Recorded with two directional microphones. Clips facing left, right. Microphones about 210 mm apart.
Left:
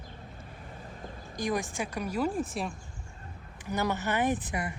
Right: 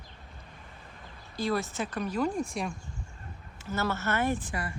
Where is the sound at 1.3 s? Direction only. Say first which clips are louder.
Right 1 dB; 15° left (ahead or behind).